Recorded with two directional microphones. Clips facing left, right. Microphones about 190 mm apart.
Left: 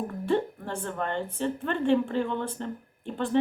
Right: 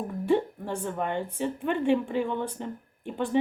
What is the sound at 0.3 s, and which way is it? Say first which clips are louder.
A woman's voice: right 2 dB; 10° right (ahead or behind).